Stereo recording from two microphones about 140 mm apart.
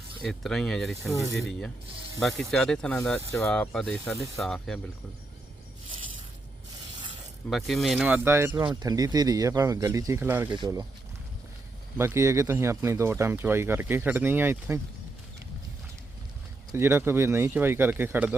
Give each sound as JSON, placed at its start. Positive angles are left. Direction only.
{"t": 0.2, "sound": "speech", "side_deg": 0}
{"t": 7.5, "sound": "speech", "side_deg": 0}
{"t": 8.0, "sound": "speech", "side_deg": -15}
{"t": 11.9, "sound": "speech", "side_deg": -20}
{"t": 16.7, "sound": "speech", "side_deg": -15}